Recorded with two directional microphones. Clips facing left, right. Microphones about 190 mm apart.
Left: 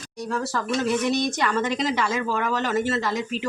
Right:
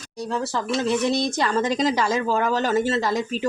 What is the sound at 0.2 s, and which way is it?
Speech, 25° right (ahead or behind).